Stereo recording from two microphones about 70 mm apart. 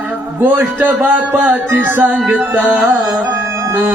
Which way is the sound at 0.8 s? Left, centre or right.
Right.